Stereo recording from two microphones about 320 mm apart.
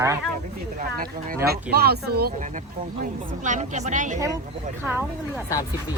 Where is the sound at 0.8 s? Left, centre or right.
Right.